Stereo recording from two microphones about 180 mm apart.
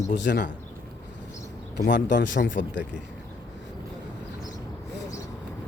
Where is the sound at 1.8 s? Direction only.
80° left.